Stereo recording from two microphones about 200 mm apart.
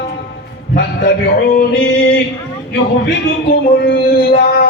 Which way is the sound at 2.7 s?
55° left (ahead or behind).